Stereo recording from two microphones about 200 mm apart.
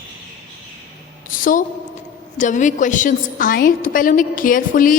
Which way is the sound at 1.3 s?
40° left (ahead or behind).